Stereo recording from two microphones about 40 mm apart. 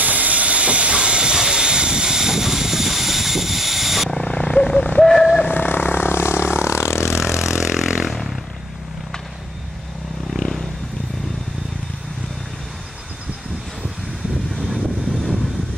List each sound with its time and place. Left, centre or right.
0.0 s train: right; by 4.1 s centre
4.1 s vehicle: left
4.6 s vehicle: centre
5.0 s a sound: centre
5.4 s vehicle: left
7.1 s vehicle: centre
10.3 s vehicle: centre